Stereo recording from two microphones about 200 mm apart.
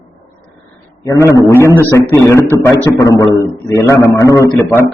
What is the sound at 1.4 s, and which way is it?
A man's voice, 15° left (ahead or behind).